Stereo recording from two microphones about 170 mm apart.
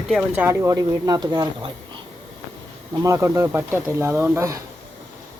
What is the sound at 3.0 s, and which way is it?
Speech, 20° right (ahead or behind).